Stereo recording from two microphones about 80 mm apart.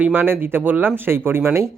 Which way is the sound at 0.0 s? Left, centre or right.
Right.